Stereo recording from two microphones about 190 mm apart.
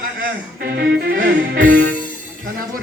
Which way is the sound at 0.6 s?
55° right (ahead or behind).